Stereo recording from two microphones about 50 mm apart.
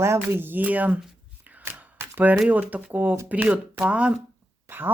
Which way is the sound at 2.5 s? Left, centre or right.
Right.